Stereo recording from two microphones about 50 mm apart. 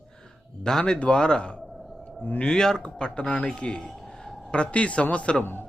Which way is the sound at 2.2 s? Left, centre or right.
Left.